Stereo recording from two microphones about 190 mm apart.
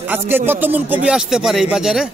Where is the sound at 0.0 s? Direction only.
10° right (ahead or behind).